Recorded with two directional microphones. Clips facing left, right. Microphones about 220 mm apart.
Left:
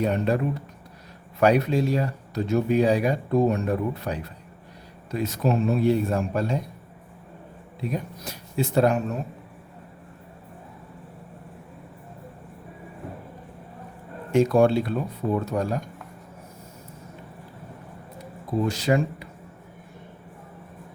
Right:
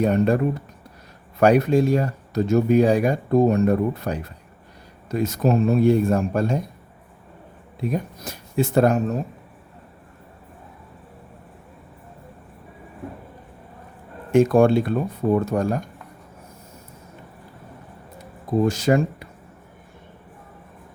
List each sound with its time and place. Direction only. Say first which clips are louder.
0.0 s speech: right 5 dB; 45° right (ahead or behind)
7.9 s speech: right 4 dB; 50° right (ahead or behind)
14.3 s speech: right 3 dB; 50° right (ahead or behind)
18.6 s speech: right 4 dB; 45° right (ahead or behind)